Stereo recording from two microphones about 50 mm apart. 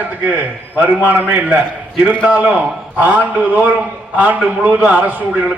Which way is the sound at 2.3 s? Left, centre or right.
Right.